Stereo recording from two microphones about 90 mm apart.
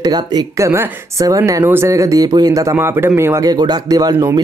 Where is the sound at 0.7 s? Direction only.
35° right (ahead or behind).